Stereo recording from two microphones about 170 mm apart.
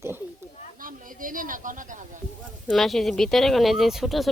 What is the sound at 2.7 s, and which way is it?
Speech, centre (ahead or behind).